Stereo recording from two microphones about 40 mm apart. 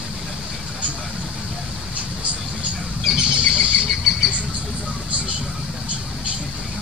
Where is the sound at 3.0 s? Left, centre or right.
Centre.